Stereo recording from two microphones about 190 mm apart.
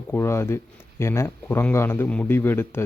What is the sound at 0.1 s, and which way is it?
Speech, 15° left (ahead or behind).